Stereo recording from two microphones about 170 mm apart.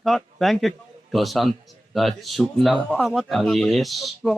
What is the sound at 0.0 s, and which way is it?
Speech, centre (ahead or behind).